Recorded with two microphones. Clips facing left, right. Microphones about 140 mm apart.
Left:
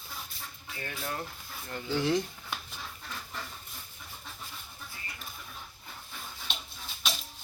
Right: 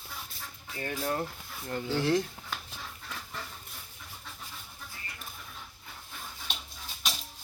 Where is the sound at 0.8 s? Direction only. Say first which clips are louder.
Right 5 dB; 35° right (ahead or behind).